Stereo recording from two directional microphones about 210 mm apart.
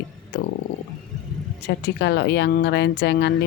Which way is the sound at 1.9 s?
55° left (ahead or behind).